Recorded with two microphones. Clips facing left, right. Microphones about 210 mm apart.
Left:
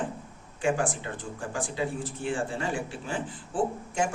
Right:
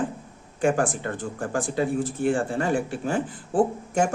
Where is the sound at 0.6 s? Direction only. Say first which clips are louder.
Right 5 dB; 50° right (ahead or behind).